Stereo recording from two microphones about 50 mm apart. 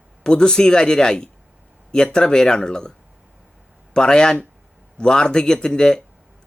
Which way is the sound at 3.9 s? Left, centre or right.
Centre.